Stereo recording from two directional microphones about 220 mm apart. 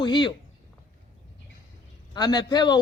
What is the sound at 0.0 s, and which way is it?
Speech, 20° left (ahead or behind).